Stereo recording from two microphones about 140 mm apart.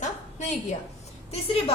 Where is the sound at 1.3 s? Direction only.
40° left (ahead or behind).